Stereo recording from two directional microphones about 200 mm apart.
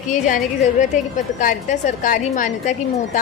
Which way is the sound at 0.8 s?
40° left (ahead or behind).